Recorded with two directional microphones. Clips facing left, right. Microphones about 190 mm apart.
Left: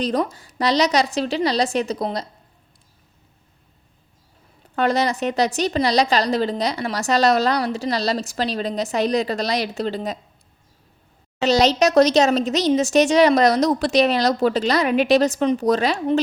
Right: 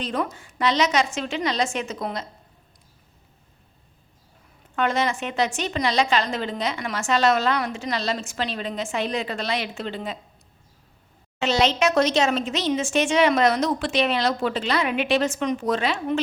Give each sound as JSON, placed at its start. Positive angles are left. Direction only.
{"t": 0.0, "sound": "a woman's voice", "side_deg": 40}
{"t": 4.7, "sound": "a woman's voice", "side_deg": 35}
{"t": 11.3, "sound": "a woman's voice", "side_deg": 40}